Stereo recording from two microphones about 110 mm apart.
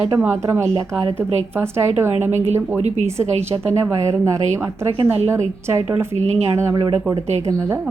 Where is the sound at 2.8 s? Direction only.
90° right.